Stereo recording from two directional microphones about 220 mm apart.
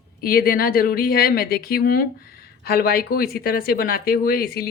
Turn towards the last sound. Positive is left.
turn(degrees=45)  # may be behind; listen again after turning